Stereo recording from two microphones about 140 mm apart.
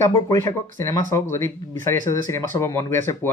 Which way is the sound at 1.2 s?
20° left (ahead or behind).